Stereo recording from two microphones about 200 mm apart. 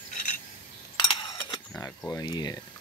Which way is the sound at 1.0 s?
20° left (ahead or behind).